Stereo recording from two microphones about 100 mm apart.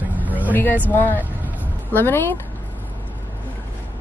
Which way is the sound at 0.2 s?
15° right (ahead or behind).